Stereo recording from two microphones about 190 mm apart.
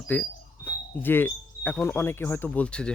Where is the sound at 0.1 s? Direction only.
10° left (ahead or behind).